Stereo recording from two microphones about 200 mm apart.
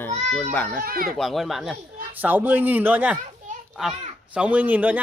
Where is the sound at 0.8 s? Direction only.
50° right (ahead or behind).